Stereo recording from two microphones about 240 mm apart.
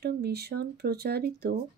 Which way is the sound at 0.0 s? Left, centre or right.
Right.